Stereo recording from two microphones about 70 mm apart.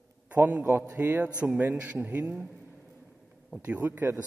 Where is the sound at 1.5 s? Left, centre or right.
Right.